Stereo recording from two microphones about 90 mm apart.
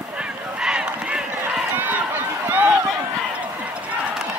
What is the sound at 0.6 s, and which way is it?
Crowd, 10° right (ahead or behind).